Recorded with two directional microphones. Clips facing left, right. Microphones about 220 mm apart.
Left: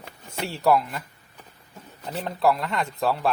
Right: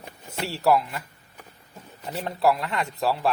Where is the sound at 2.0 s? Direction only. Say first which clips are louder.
Even; centre (ahead or behind).